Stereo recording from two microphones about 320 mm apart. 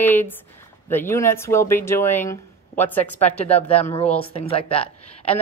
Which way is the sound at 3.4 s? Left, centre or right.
Centre.